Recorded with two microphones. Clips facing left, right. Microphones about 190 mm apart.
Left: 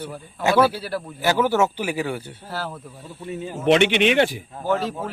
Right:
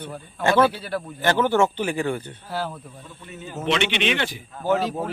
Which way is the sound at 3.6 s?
50° left (ahead or behind).